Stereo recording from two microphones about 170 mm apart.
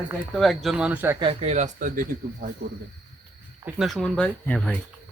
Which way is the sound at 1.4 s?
40° right (ahead or behind).